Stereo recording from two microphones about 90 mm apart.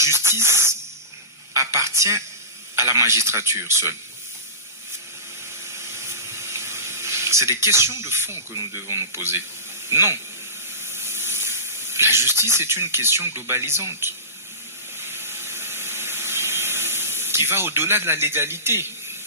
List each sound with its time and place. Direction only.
0.0 s hiss: 30° right (ahead or behind)
1.5 s a sound: 30° right (ahead or behind)
2.7 s a man's voice: 30° right (ahead or behind)
5.6 s water: 30° right (ahead or behind)
7.6 s speech: 30° right (ahead or behind)
14.9 s a sound: 25° right (ahead or behind)